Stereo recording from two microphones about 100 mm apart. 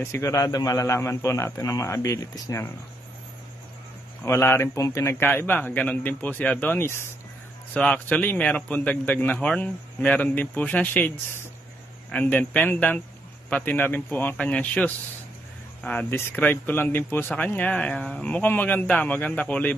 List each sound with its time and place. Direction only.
0.0 s a man's voice: 30° left (ahead or behind)
4.2 s a man's voice: 25° left (ahead or behind)
7.7 s a man's voice: 10° left (ahead or behind)